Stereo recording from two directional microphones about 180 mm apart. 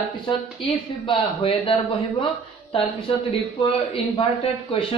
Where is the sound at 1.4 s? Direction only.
30° left (ahead or behind).